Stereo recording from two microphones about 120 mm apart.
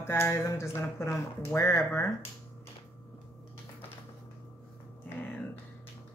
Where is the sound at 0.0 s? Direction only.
20° left (ahead or behind).